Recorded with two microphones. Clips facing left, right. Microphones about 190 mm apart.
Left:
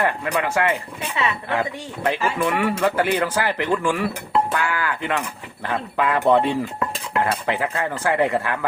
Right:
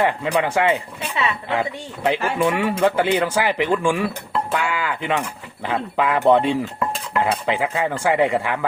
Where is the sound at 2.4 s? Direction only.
20° right (ahead or behind).